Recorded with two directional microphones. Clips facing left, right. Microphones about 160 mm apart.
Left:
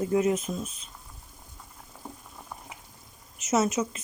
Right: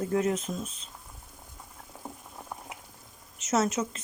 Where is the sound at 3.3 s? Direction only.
10° left (ahead or behind).